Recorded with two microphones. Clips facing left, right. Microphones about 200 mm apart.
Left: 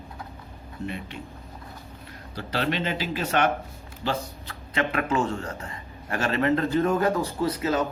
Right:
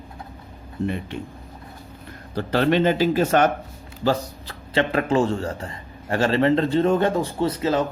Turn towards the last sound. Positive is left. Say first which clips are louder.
# right 3 dB
turn(degrees=-30)  # may be behind; listen again after turning